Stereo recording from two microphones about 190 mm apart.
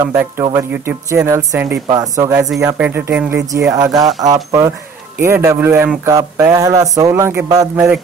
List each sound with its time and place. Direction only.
0.0 s speech: 15° right (ahead or behind)